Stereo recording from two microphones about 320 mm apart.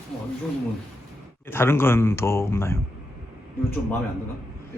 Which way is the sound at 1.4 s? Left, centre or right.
Centre.